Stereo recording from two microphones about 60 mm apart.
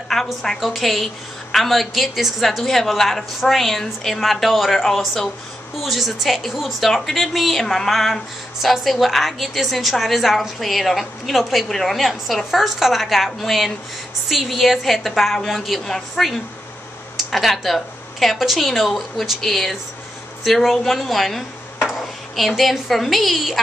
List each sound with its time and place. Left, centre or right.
0.1 s a woman's voice: centre